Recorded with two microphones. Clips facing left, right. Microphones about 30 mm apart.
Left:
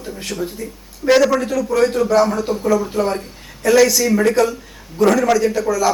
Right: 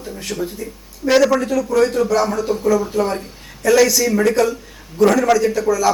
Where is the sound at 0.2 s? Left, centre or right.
Centre.